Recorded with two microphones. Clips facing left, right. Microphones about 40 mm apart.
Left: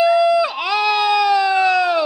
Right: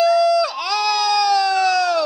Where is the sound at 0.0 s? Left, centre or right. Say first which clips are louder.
Left 1 dB; left.